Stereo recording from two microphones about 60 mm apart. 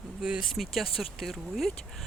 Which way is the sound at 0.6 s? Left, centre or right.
Centre.